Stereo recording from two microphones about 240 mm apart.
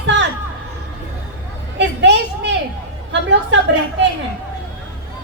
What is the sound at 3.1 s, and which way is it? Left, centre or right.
Speech, right.